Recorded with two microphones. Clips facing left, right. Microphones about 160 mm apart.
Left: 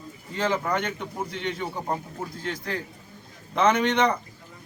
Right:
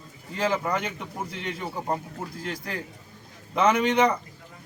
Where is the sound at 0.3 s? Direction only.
10° right (ahead or behind).